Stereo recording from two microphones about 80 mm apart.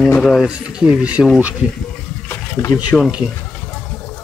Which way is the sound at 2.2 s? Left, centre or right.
Left.